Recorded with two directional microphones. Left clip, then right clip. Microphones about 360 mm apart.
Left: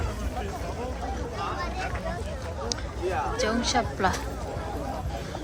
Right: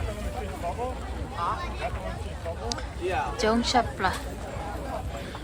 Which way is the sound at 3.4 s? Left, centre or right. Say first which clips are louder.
Right 4 dB; centre.